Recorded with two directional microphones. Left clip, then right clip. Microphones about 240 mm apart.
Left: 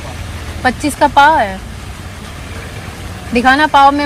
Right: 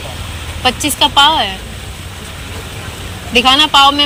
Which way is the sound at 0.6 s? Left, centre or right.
Left.